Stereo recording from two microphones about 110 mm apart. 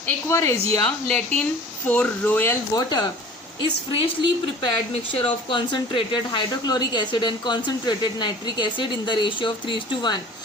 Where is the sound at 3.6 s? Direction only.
50° left (ahead or behind).